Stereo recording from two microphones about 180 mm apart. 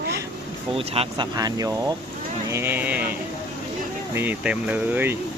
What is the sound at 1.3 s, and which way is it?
Speech, 20° right (ahead or behind).